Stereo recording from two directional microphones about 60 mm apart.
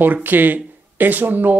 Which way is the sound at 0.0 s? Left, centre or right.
Right.